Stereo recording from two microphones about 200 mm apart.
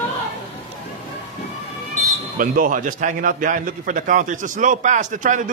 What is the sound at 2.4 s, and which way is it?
A man's voice, 40° right (ahead or behind).